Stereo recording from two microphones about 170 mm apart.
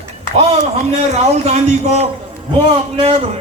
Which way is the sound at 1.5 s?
40° right (ahead or behind).